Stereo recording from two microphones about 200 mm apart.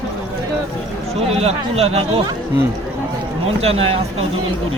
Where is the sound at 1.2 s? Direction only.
30° right (ahead or behind).